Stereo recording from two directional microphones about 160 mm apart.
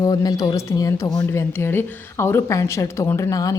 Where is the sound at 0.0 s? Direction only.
25° left (ahead or behind).